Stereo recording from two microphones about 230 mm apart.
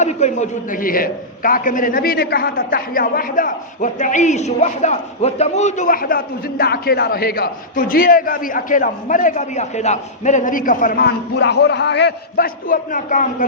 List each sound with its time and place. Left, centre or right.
0.0 s a man's voice: left